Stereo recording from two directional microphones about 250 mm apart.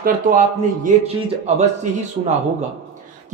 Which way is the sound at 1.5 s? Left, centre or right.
Right.